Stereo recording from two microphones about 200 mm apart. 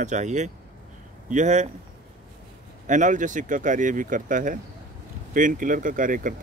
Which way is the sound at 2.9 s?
40° right (ahead or behind).